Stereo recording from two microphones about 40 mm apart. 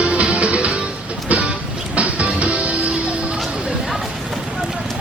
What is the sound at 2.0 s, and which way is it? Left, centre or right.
Music, right.